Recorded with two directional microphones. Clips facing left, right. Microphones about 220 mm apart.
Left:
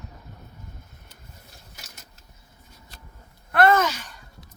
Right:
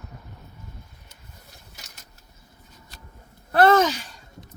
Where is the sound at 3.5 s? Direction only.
30° right (ahead or behind).